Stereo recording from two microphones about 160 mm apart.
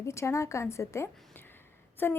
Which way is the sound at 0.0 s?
15° left (ahead or behind).